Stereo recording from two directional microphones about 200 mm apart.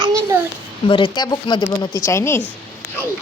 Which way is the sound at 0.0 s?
15° right (ahead or behind).